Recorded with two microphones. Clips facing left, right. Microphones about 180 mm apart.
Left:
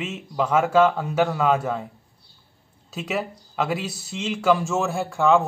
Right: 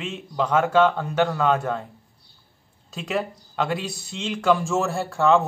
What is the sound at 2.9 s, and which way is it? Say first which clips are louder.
A man's voice: right 1 dB; 5° left (ahead or behind).